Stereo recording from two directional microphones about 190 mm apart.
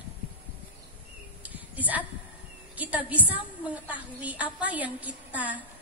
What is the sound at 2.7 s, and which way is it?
A woman's voice, 10° right (ahead or behind).